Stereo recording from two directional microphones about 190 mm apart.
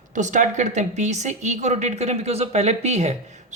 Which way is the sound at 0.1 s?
40° right (ahead or behind).